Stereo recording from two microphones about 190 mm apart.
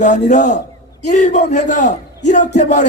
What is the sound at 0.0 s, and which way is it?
A man's voice, 40° left (ahead or behind).